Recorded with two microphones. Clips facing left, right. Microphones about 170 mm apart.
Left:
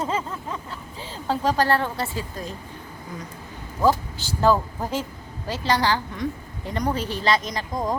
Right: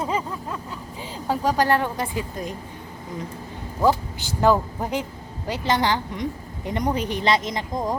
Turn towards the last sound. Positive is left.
turn(degrees=-20)  # may be behind; listen again after turning